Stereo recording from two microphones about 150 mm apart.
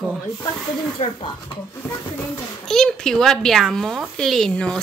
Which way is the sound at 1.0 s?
35° left (ahead or behind).